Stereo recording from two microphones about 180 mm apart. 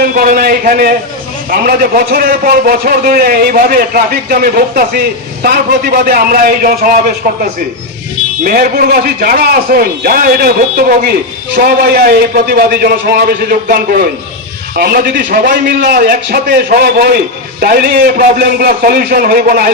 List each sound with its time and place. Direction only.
0.0 s a man's voice: 50° right (ahead or behind)
8.4 s a man's voice: 55° right (ahead or behind)